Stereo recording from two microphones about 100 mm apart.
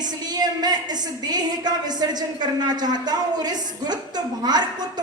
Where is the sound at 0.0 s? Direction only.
45° right (ahead or behind).